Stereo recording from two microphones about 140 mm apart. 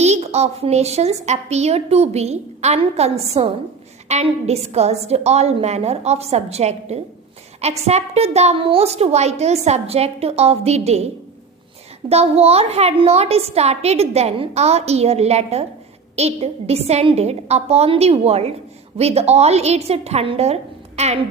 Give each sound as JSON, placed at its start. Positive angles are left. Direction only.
{"t": 0.0, "sound": "a woman's voice", "side_deg": -50}